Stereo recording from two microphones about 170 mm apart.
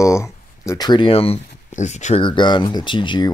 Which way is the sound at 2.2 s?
25° left (ahead or behind).